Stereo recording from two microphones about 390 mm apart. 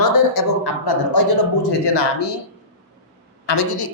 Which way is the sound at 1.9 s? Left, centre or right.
Left.